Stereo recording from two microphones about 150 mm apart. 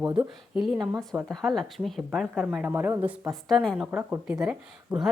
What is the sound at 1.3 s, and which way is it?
A woman's voice, centre (ahead or behind).